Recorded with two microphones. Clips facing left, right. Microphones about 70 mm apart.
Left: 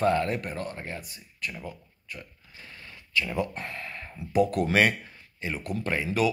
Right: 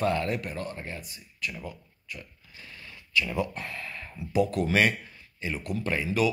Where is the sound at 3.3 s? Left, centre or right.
Left.